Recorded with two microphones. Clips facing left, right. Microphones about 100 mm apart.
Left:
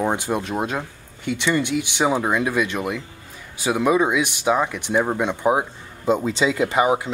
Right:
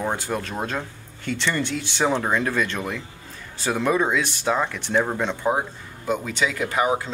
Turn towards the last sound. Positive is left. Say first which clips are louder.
# left 3 dB
turn(degrees=15)  # may be behind; listen again after turning